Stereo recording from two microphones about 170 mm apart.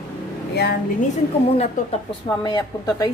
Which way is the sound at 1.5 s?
35° left (ahead or behind).